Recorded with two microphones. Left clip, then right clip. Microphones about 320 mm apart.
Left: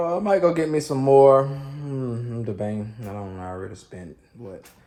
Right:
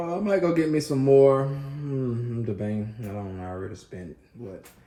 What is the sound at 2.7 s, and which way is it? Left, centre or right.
Speech, left.